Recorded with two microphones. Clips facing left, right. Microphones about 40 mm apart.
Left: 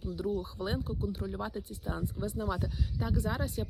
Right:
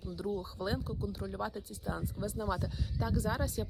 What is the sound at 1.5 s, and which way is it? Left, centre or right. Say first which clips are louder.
Speech: left 3 dB; left.